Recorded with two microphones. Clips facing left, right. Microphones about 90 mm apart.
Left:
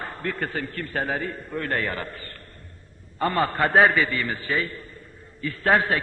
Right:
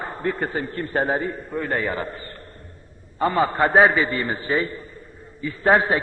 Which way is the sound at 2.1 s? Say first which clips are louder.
Right 4 dB; 25° right (ahead or behind).